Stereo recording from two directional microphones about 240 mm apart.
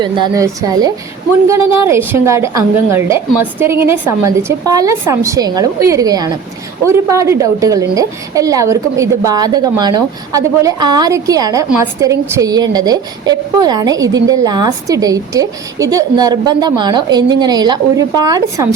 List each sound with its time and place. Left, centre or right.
0.0 s a woman's voice: centre